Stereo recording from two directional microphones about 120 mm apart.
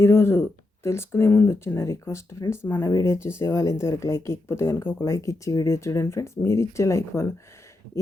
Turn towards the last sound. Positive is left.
turn(degrees=25)  # may be behind; listen again after turning